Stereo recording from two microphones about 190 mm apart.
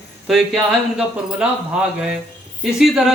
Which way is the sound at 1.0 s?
5° right (ahead or behind).